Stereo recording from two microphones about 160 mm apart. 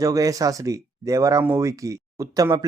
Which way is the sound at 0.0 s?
20° right (ahead or behind).